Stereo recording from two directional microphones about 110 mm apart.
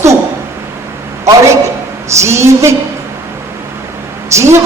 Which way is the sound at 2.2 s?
25° right (ahead or behind).